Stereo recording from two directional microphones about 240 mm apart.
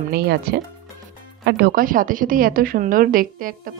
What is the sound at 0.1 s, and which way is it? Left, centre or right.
A woman's voice, right.